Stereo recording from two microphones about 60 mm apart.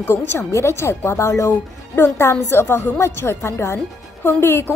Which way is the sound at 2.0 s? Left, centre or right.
Left.